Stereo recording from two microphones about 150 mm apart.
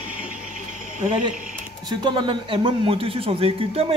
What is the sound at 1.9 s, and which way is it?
A man's voice, 30° right (ahead or behind).